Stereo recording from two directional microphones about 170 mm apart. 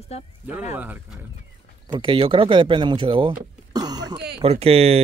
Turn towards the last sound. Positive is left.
turn(degrees=-35)  # may be behind; listen again after turning